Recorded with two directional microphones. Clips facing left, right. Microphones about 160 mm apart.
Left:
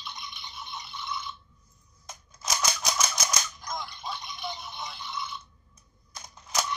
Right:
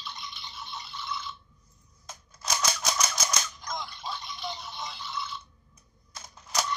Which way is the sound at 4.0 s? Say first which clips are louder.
Even; 15° left (ahead or behind).